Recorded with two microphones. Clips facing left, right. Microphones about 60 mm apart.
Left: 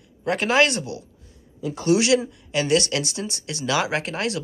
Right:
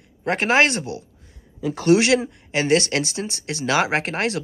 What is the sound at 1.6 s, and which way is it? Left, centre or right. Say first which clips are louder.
Speech: right 4 dB; right.